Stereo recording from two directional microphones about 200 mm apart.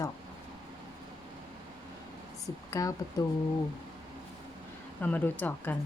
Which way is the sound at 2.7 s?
15° left (ahead or behind).